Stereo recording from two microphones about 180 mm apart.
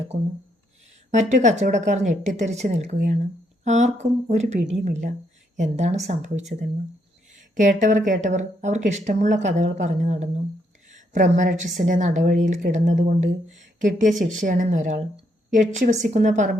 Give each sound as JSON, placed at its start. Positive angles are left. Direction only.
{"t": 1.1, "sound": "a woman's voice", "side_deg": -40}